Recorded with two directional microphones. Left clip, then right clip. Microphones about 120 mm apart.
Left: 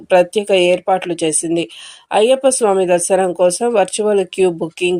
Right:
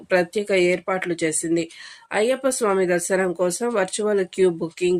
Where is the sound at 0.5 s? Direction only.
15° right (ahead or behind).